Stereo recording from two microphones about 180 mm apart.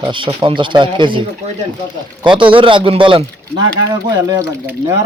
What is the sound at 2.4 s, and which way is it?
Speech, 30° right (ahead or behind).